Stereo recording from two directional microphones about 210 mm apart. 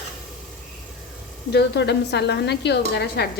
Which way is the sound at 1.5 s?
55° left (ahead or behind).